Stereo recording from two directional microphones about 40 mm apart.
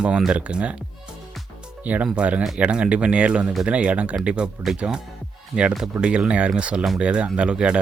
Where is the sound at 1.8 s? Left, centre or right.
Right.